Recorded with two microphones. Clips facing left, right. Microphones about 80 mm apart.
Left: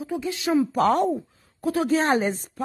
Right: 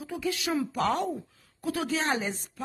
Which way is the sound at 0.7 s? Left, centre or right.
Left.